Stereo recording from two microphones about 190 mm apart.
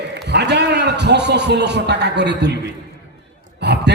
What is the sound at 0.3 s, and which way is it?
A man's voice, 65° right (ahead or behind).